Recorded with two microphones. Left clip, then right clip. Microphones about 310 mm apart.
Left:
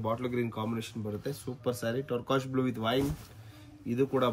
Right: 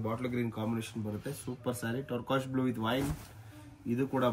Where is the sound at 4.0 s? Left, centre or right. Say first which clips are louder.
Left 4 dB; centre.